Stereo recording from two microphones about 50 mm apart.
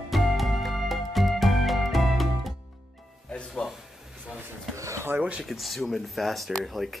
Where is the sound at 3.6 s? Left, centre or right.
Centre.